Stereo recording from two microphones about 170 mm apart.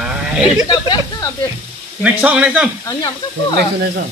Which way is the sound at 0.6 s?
25° left (ahead or behind).